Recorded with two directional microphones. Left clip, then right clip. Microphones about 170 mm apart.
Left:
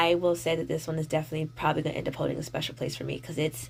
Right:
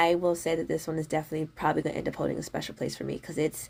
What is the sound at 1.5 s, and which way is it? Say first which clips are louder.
Speech: even; 25° right (ahead or behind).